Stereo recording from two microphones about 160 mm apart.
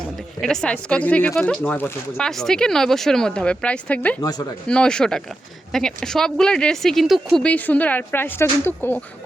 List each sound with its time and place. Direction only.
0.4 s speech: 5° left (ahead or behind)
4.2 s speech: 25° left (ahead or behind)
4.7 s speech: 5° left (ahead or behind)